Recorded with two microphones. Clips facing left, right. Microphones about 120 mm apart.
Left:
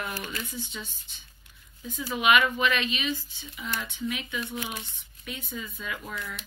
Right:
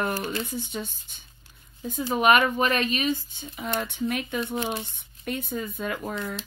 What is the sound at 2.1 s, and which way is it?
Speech, 45° right (ahead or behind).